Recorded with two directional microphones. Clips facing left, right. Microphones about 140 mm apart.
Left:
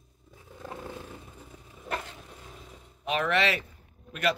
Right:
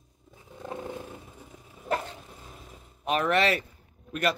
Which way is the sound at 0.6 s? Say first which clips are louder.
Right 4 dB; 20° right (ahead or behind).